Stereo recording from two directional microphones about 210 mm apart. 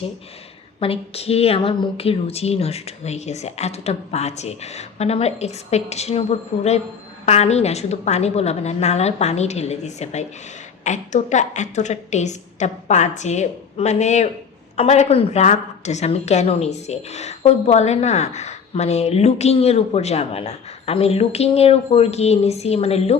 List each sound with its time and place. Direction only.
0.8 s a woman's voice: 30° left (ahead or behind)